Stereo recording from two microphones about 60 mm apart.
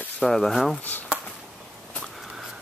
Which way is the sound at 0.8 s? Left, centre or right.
Left.